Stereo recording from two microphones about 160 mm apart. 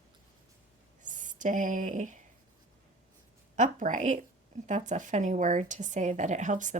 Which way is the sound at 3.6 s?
55° right (ahead or behind).